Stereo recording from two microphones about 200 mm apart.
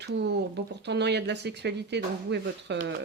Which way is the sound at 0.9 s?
60° right (ahead or behind).